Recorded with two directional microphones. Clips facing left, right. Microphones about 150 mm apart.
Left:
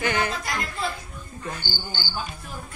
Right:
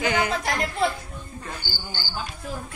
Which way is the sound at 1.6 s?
25° left (ahead or behind).